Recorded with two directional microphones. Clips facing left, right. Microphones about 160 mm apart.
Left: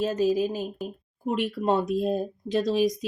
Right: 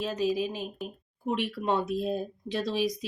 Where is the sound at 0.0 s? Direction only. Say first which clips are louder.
Left 5 dB; 45° left (ahead or behind).